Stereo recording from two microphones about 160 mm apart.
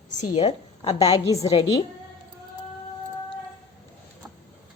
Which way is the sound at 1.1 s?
20° left (ahead or behind).